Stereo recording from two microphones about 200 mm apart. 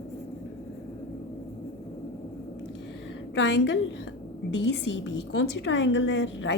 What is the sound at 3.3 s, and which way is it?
A woman's voice, 65° left (ahead or behind).